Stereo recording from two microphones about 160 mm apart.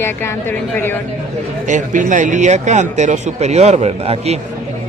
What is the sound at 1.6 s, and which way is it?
Speech, 50° right (ahead or behind).